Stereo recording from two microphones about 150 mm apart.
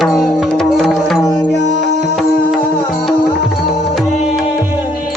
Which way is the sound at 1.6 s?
55° right (ahead or behind).